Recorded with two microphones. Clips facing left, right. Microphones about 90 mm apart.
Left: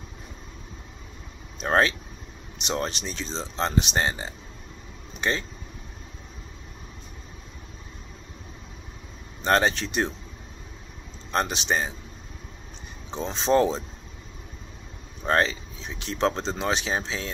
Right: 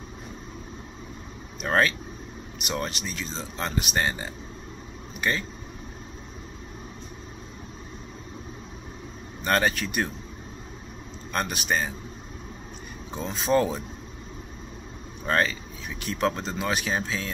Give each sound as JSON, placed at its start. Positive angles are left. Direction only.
{"t": 1.6, "sound": "speech", "side_deg": 25}
{"t": 9.4, "sound": "speech", "side_deg": 25}
{"t": 11.3, "sound": "speech", "side_deg": 25}
{"t": 13.1, "sound": "speech", "side_deg": 25}
{"t": 15.2, "sound": "speech", "side_deg": 25}